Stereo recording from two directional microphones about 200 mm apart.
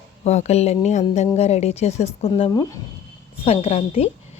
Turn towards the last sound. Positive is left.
turn(degrees=30)  # may be behind; listen again after turning